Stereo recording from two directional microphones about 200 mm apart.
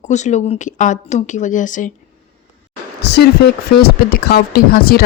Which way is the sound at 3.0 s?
55° left (ahead or behind).